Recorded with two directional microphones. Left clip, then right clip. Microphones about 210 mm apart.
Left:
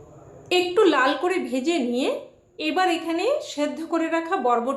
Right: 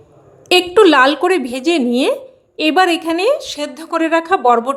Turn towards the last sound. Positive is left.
turn(degrees=-50)  # may be behind; listen again after turning